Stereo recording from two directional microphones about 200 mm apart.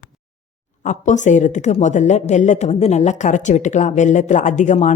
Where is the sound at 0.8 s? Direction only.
40° left (ahead or behind).